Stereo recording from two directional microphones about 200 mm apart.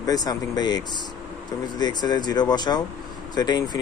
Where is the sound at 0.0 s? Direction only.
20° left (ahead or behind).